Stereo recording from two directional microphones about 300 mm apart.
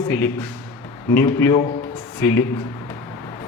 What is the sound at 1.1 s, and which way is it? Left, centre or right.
Speech, centre.